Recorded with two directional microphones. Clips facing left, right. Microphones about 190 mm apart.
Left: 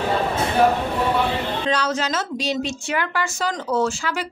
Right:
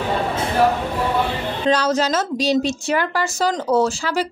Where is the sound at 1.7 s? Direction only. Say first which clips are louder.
Right 7 dB; 40° right (ahead or behind).